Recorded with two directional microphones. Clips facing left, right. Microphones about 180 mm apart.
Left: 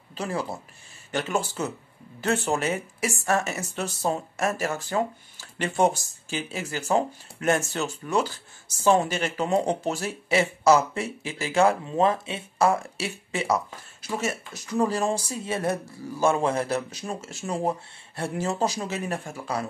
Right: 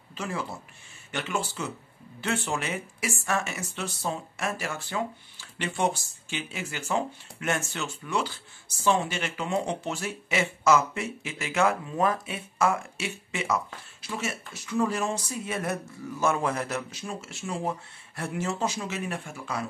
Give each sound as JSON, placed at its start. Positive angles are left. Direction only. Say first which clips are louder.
{"t": 0.1, "sound": "speech", "louder": "left 4 dB", "side_deg": 35}